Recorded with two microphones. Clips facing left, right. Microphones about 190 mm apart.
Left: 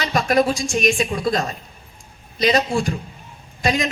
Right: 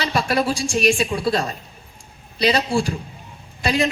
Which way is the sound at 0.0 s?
35° right (ahead or behind).